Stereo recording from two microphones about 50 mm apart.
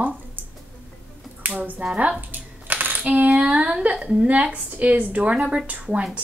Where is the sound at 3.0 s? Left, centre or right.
Right.